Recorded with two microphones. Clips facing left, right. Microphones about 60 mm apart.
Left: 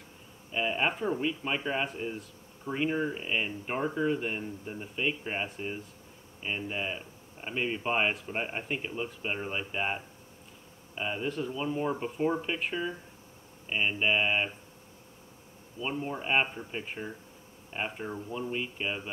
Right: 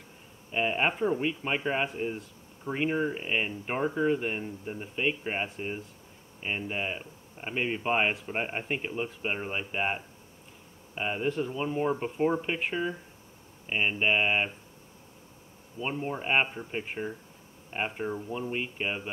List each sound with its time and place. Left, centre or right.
0.5 s speech: right
15.8 s speech: centre